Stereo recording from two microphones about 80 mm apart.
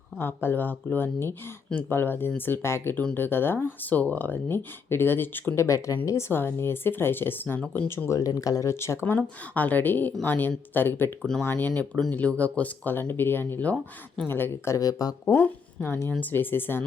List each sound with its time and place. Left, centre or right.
0.2 s speech: left
2.9 s speech: centre
3.2 s speech: left
5.5 s speech: left
8.2 s speech: left
8.7 s speech: left
9.6 s speech: left
15.2 s speech: left